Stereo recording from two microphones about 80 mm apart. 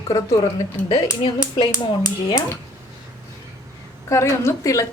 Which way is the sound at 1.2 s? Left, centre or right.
Left.